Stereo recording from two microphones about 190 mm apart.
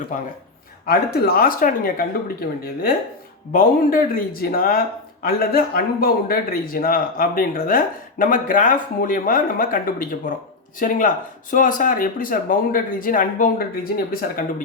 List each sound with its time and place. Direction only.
0.1 s a man's voice: 45° left (ahead or behind)
3.5 s a man's voice: 50° left (ahead or behind)